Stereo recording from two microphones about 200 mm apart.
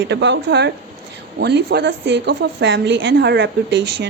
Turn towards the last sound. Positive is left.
turn(degrees=-60)  # may be behind; listen again after turning